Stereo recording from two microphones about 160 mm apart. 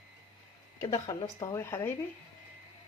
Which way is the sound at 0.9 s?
30° left (ahead or behind).